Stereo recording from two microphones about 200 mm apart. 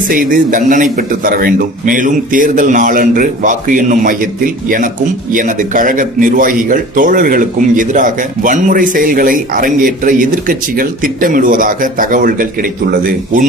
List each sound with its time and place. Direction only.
0.1 s a man's voice: 45° right (ahead or behind)